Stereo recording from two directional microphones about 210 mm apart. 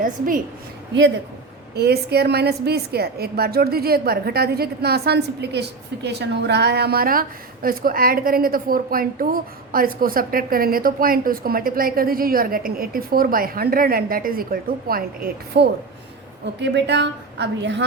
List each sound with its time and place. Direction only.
0.0 s a woman's voice: 40° right (ahead or behind)
1.7 s a woman's voice: 50° right (ahead or behind)